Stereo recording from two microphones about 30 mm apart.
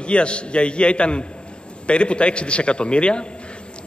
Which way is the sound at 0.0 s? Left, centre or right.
Left.